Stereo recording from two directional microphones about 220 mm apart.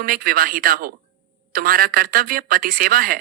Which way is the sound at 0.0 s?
40° right (ahead or behind).